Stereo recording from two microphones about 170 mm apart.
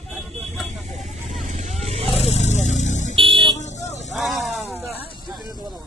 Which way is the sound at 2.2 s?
40° left (ahead or behind).